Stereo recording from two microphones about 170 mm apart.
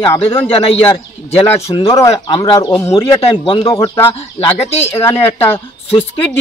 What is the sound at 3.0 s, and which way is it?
A man's voice, 30° left (ahead or behind).